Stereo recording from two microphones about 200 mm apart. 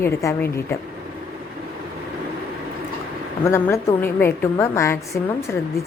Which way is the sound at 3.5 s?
15° left (ahead or behind).